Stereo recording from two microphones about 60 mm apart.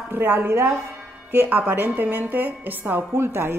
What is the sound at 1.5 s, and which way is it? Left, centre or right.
A woman's voice, right.